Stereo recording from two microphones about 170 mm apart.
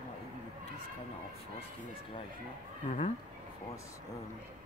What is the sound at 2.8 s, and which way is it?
Speech, 40° left (ahead or behind).